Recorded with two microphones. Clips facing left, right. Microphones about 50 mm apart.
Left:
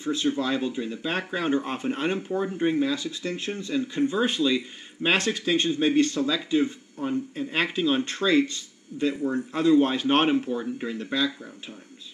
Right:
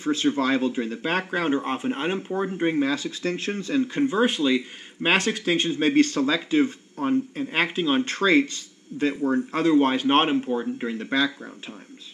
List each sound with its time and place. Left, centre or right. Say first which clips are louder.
0.0 s speech: right 3 dB; right
2.0 s speech: right 1 dB; right
3.7 s speech: right 2 dB; right
5.8 s speech: right 2 dB; right
7.4 s speech: left 2 dB; right
8.0 s speech: right 5 dB; right